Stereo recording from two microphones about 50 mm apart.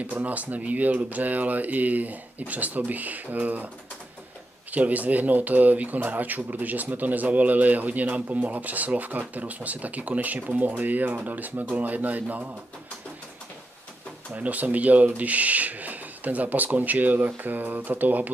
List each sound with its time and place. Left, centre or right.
0.0 s speech: right
4.7 s speech: right
14.3 s speech: right